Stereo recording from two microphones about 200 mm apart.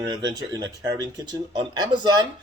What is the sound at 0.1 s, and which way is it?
A man's voice, 20° right (ahead or behind).